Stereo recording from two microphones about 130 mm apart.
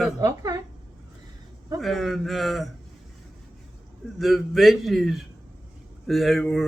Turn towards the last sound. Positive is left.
turn(degrees=0)  # may be behind; listen again after turning